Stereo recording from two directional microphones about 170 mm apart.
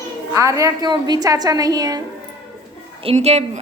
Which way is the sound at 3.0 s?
40° right (ahead or behind).